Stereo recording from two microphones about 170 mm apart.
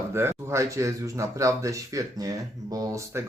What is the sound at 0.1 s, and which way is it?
Speech, 15° right (ahead or behind).